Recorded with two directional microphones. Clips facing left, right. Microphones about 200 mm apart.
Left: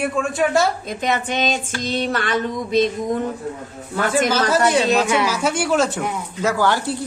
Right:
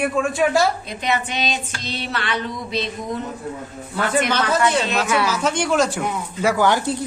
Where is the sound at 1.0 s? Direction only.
50° left (ahead or behind).